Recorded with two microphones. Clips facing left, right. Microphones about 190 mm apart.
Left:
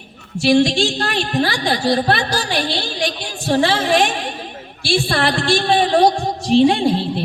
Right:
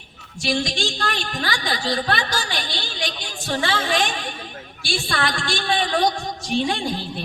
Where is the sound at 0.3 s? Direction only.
30° left (ahead or behind).